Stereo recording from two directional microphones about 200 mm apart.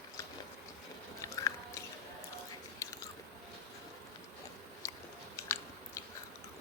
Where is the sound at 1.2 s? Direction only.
15° left (ahead or behind).